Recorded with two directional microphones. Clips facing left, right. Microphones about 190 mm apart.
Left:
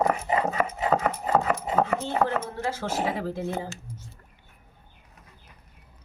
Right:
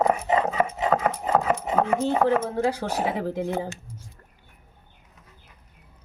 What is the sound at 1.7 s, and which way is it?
Chopping, 10° right (ahead or behind).